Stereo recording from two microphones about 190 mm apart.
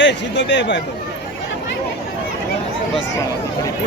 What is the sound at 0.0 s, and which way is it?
Speech, 70° left (ahead or behind).